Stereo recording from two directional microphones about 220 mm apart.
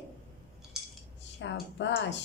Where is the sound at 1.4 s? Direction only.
55° left (ahead or behind).